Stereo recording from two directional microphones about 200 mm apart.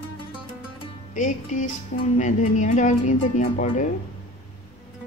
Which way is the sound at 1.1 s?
40° left (ahead or behind).